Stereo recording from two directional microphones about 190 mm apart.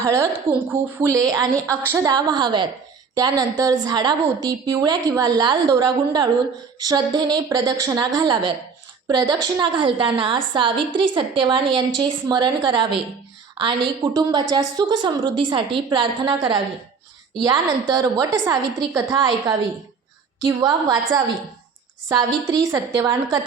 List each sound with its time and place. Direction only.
0.0 s a woman's voice: 15° right (ahead or behind)